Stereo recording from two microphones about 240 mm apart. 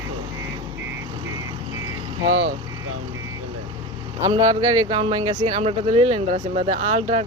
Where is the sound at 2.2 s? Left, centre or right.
Right.